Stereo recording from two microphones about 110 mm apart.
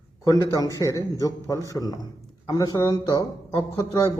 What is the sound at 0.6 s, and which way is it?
Speech, 30° left (ahead or behind).